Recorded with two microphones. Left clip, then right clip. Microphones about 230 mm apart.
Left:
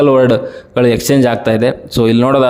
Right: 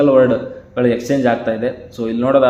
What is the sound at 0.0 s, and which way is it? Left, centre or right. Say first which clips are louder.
A man's voice: left 2 dB; left.